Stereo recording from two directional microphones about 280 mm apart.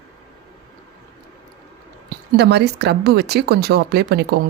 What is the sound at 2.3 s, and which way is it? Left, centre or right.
A woman's voice, right.